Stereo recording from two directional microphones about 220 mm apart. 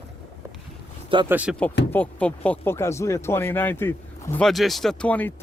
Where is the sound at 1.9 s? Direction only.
5° left (ahead or behind).